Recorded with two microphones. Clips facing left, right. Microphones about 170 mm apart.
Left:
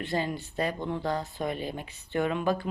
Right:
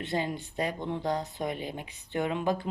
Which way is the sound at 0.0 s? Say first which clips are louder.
Left 1 dB; 20° right (ahead or behind).